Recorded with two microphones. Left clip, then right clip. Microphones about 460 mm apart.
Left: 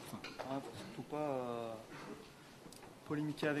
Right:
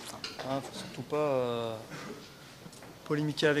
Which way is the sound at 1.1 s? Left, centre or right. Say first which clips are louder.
Right 10 dB; right.